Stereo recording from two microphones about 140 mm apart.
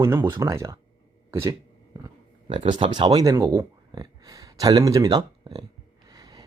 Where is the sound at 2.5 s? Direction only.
35° right (ahead or behind).